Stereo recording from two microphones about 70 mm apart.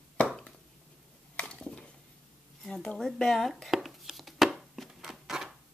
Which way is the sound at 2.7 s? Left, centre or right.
Centre.